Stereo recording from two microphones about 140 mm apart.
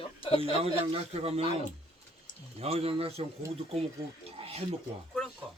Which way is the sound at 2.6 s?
45° right (ahead or behind).